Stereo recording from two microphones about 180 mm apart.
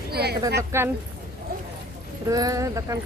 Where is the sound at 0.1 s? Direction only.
65° right (ahead or behind).